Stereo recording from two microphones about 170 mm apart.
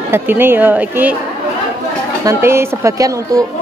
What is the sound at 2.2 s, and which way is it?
A woman's voice, 15° right (ahead or behind).